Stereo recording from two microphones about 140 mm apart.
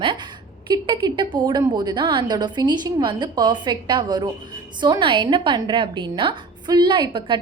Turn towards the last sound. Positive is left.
turn(degrees=-35)  # may be behind; listen again after turning